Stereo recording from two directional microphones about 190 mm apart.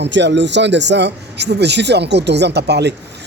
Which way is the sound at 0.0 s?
65° right (ahead or behind).